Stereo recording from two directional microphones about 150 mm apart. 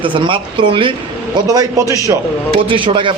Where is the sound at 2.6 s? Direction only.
35° right (ahead or behind).